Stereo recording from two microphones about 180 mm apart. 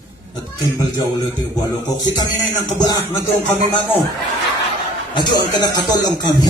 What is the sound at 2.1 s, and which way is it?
Speech, 25° left (ahead or behind).